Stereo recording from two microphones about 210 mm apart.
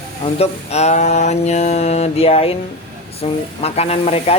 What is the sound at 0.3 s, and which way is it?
Mantra, 30° left (ahead or behind).